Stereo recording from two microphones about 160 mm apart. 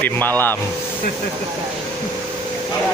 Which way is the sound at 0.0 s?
10° left (ahead or behind).